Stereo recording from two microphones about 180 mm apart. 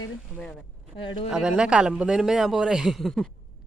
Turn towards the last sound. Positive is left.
turn(degrees=0)  # may be behind; listen again after turning